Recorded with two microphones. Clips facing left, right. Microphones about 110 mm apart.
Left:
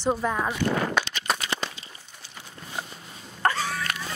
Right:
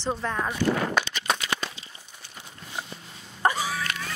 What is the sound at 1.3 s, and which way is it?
Crumpling, 5° left (ahead or behind).